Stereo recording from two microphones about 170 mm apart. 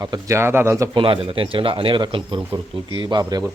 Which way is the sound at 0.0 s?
20° right (ahead or behind).